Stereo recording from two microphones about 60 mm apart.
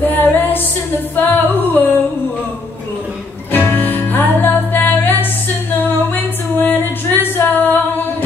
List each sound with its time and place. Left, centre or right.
0.1 s female singing: left
1.1 s singing: left
3.5 s music: left